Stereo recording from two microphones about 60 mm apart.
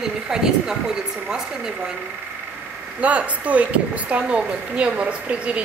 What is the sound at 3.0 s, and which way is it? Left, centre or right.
Speech, right.